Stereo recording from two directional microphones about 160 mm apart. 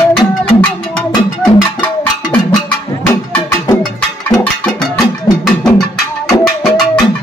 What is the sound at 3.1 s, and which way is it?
Music, 15° left (ahead or behind).